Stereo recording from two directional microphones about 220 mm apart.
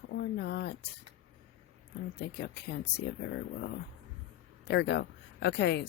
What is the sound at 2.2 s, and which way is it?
Speech, 45° left (ahead or behind).